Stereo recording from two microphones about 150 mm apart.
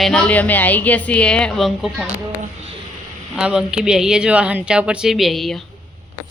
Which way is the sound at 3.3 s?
5° right (ahead or behind).